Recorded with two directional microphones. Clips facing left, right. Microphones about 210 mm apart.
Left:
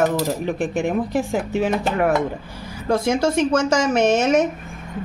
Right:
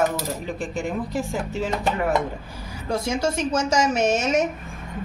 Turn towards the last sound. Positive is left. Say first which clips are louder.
# left 4 dB
turn(degrees=55)  # may be behind; listen again after turning